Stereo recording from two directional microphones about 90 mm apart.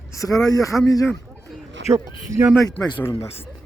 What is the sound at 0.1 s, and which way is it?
Speech, 40° left (ahead or behind).